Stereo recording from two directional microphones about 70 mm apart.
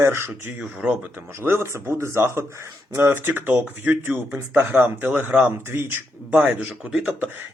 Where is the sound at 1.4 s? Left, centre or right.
Right.